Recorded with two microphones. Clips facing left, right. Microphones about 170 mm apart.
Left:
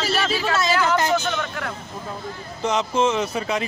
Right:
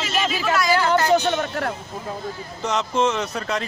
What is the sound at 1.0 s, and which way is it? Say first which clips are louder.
Speech: right 4 dB; 35° right (ahead or behind).